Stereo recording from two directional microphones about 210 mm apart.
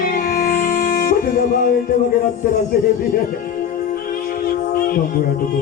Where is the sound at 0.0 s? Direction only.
45° left (ahead or behind).